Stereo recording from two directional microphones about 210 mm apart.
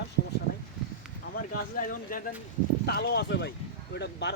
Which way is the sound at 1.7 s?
40° left (ahead or behind).